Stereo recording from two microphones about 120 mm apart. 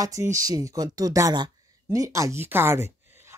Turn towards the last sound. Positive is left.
turn(degrees=-20)  # may be behind; listen again after turning